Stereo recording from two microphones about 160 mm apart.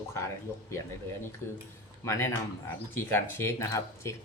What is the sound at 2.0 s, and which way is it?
Speech, 20° left (ahead or behind).